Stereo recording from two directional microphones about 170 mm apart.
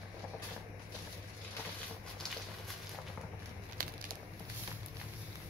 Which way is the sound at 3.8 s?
55° right (ahead or behind).